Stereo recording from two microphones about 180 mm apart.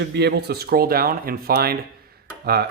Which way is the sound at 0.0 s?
70° right (ahead or behind).